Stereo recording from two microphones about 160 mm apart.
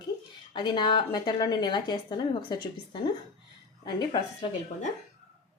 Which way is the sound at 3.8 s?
25° left (ahead or behind).